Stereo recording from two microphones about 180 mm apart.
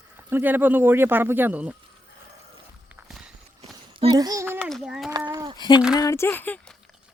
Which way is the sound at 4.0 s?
25° right (ahead or behind).